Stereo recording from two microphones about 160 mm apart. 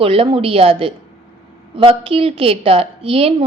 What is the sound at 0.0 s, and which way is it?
A woman's voice, 35° right (ahead or behind).